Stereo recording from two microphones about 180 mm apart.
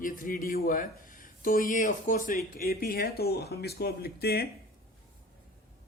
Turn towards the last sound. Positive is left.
turn(degrees=60)  # may be behind; listen again after turning